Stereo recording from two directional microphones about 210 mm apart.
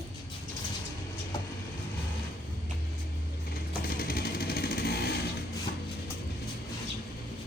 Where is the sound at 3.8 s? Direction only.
45° left (ahead or behind).